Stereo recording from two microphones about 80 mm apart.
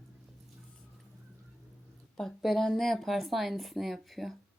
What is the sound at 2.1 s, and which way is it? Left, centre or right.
Speech, centre.